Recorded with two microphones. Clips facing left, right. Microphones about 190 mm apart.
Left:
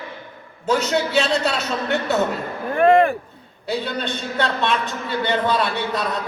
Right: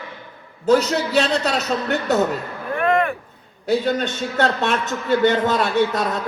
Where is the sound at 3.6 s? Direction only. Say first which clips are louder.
Right 5 dB; 45° right (ahead or behind).